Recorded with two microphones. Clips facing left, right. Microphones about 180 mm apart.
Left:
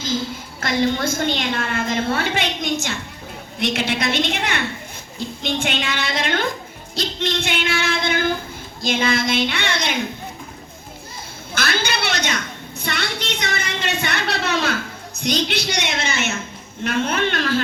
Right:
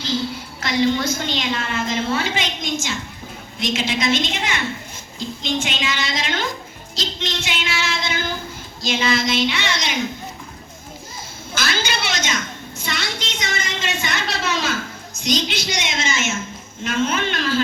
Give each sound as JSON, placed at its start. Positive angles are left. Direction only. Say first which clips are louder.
{"t": 0.6, "sound": "a woman's voice", "louder": "right 1 dB", "side_deg": 50}
{"t": 11.5, "sound": "a sound", "louder": "left 1 dB", "side_deg": 60}
{"t": 16.8, "sound": "a woman's voice", "louder": "left 1 dB", "side_deg": 60}